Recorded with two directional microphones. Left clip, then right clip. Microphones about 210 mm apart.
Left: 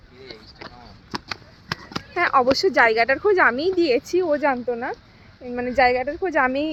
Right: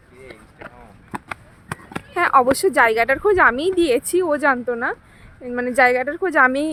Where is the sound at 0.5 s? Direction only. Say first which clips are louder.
Right 1 dB; 30° right (ahead or behind).